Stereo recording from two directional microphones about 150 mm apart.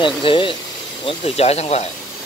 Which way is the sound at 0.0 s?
35° left (ahead or behind).